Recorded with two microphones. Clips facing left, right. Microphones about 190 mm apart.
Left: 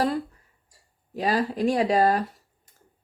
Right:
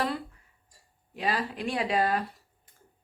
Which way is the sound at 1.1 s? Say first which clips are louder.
Left 6 dB; 40° left (ahead or behind).